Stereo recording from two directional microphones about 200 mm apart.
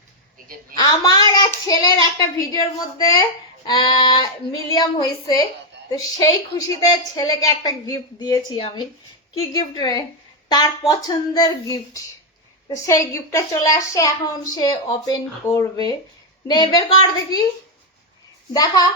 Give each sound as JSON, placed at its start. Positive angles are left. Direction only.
{"t": 0.8, "sound": "a woman's voice", "side_deg": 20}
{"t": 18.5, "sound": "speech", "side_deg": 20}